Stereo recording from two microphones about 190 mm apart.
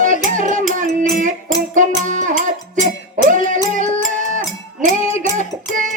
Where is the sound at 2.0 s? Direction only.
40° right (ahead or behind).